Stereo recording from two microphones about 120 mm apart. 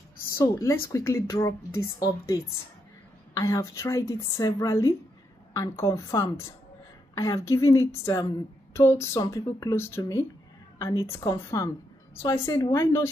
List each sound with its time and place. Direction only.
0.4 s a woman's voice: 25° left (ahead or behind)